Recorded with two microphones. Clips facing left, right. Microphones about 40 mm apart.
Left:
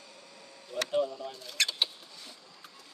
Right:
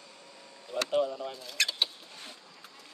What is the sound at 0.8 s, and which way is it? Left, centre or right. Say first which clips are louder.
Speech: right 1 dB; right.